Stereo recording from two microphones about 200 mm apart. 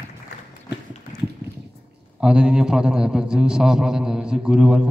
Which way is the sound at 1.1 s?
5° left (ahead or behind).